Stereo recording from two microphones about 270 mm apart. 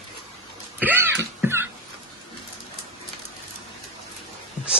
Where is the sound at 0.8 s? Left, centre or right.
Centre.